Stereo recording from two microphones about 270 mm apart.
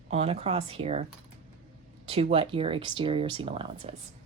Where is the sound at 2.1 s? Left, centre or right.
Right.